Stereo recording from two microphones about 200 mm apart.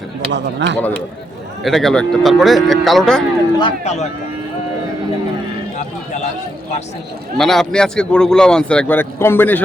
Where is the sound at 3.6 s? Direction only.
35° left (ahead or behind).